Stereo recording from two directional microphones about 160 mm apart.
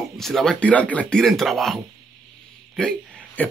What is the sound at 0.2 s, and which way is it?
Speech, centre (ahead or behind).